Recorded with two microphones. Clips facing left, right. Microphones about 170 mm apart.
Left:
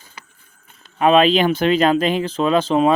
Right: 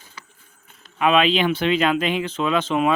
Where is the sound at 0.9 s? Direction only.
40° left (ahead or behind).